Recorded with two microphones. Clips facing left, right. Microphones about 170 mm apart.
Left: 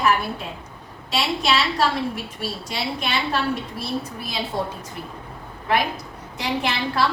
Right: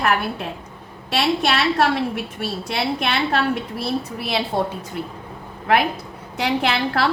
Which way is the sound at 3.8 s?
70° right (ahead or behind).